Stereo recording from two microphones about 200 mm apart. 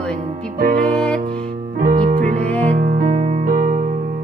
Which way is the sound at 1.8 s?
40° right (ahead or behind).